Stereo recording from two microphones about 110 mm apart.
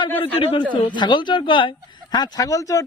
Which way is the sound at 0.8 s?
45° left (ahead or behind).